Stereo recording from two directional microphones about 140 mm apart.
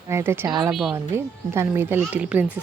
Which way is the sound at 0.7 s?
Centre (ahead or behind).